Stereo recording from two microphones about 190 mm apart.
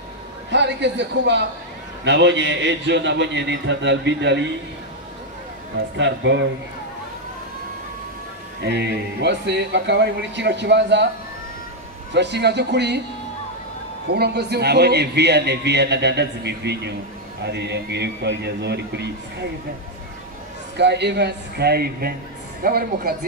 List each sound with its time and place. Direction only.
0.5 s a man's voice: 65° right (ahead or behind)
5.9 s a man's voice: 70° right (ahead or behind)
8.6 s a man's voice: 65° right (ahead or behind)
12.1 s a man's voice: 65° right (ahead or behind)
14.0 s a man's voice: 60° right (ahead or behind)
20.7 s a man's voice: 60° right (ahead or behind)